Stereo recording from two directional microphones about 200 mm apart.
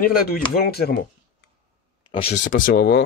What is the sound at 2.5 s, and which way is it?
Speech, 50° left (ahead or behind).